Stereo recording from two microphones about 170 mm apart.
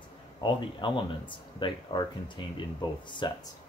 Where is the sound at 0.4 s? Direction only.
30° left (ahead or behind).